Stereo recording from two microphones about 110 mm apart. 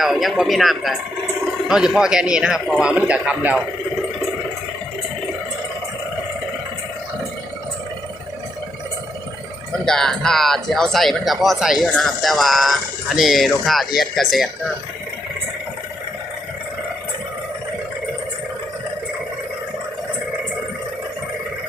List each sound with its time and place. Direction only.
0.0 s a man's voice: centre (ahead or behind)
9.8 s speech: 5° left (ahead or behind)